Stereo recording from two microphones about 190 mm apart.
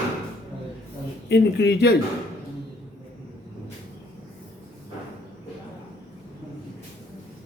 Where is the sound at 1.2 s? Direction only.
60° left (ahead or behind).